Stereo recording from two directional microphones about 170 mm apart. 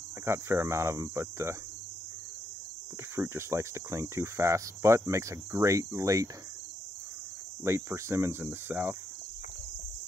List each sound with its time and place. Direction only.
0.2 s cricket: 15° right (ahead or behind)
3.2 s cricket: 15° right (ahead or behind)
7.6 s cricket: 15° right (ahead or behind)